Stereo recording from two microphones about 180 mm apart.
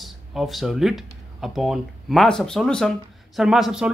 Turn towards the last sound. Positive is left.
turn(degrees=0)  # may be behind; listen again after turning